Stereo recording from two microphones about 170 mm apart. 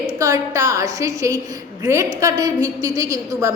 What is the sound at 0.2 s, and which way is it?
A woman's voice, 20° right (ahead or behind).